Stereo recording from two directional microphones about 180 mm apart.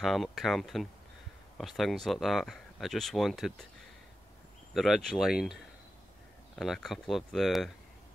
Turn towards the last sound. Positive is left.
turn(degrees=0)  # may be behind; listen again after turning